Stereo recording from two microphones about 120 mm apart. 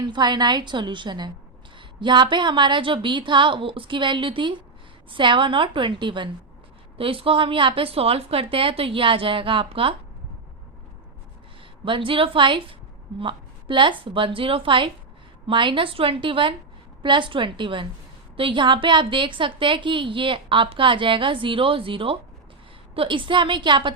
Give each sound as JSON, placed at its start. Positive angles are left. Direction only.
{"t": 0.0, "sound": "a woman's voice", "side_deg": -40}
{"t": 11.9, "sound": "a woman's voice", "side_deg": -45}